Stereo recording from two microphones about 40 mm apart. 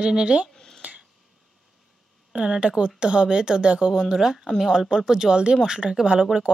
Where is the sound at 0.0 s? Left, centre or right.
Right.